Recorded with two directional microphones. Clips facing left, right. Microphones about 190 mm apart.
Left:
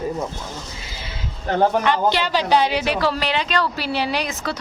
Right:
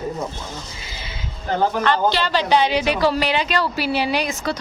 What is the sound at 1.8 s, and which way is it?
A woman's voice, 15° left (ahead or behind).